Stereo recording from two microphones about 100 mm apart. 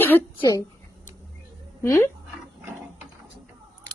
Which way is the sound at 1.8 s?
25° left (ahead or behind).